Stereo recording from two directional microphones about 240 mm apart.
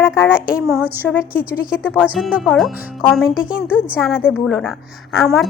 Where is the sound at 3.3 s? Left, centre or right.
Left.